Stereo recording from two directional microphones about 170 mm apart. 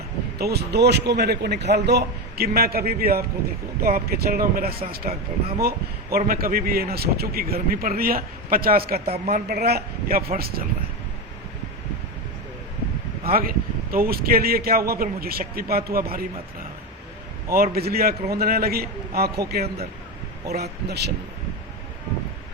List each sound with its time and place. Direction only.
0.3 s a man's voice: 70° right (ahead or behind)
2.5 s a man's voice: 65° right (ahead or behind)
13.2 s a man's voice: 60° right (ahead or behind)
17.5 s a man's voice: 65° right (ahead or behind)